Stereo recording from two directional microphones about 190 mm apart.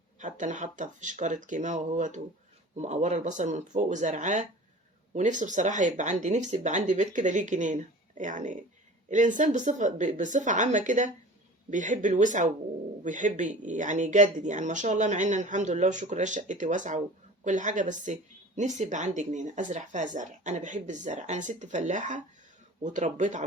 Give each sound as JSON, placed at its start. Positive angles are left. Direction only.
{"t": 0.2, "sound": "a woman's voice", "side_deg": -40}